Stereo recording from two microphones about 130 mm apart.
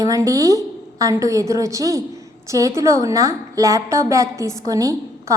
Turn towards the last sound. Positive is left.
turn(degrees=-25)  # may be behind; listen again after turning